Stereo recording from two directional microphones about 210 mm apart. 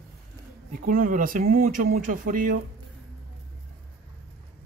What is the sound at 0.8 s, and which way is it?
Speech, 40° right (ahead or behind).